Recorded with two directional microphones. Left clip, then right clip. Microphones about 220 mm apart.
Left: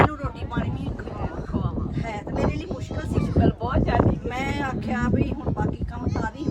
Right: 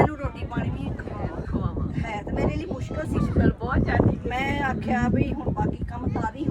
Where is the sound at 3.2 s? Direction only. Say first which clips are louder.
Left 3 dB; 45° left (ahead or behind).